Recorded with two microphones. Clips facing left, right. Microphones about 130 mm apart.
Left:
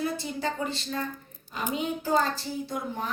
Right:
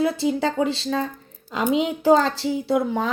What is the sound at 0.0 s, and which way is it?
Speech, 90° right.